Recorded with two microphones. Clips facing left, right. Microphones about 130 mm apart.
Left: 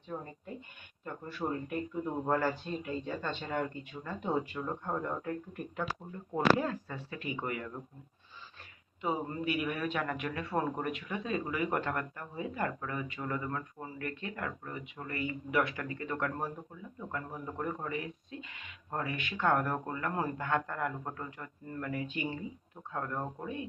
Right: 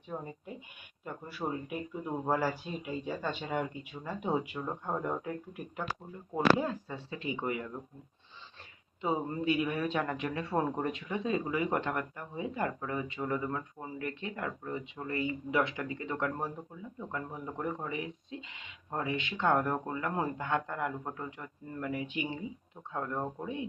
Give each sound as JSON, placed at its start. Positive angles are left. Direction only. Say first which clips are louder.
{"t": 0.1, "sound": "speech", "louder": "right 1 dB", "side_deg": -15}
{"t": 6.6, "sound": "a man's voice", "louder": "even", "side_deg": -20}
{"t": 9.0, "sound": "a man's voice", "louder": "right 2 dB", "side_deg": -25}